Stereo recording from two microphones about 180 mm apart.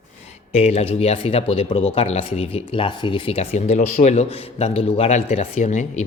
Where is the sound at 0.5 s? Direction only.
35° left (ahead or behind).